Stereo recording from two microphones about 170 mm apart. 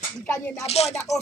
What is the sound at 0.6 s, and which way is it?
Speech, 35° left (ahead or behind).